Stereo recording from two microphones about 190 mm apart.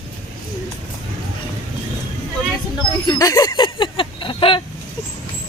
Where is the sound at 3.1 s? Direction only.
20° left (ahead or behind).